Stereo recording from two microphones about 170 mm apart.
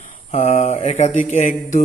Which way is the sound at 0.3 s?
40° left (ahead or behind).